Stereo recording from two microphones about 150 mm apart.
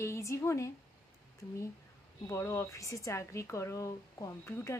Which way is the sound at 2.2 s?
20° left (ahead or behind).